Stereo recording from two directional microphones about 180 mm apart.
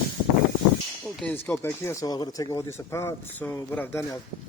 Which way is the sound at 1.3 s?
15° left (ahead or behind).